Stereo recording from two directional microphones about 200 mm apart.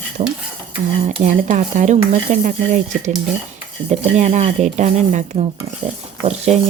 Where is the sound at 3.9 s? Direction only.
35° right (ahead or behind).